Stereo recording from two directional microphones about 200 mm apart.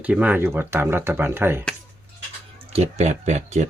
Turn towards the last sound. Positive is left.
turn(degrees=-35)  # may be behind; listen again after turning